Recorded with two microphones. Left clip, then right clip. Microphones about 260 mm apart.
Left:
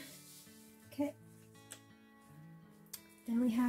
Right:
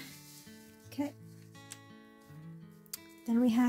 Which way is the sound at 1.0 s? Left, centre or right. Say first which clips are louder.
Right 1 dB; right.